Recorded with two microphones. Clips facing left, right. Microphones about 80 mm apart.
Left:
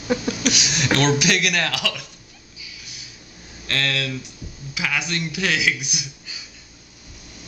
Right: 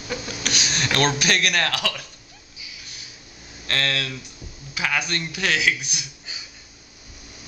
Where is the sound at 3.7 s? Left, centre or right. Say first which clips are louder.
Left 1 dB; centre.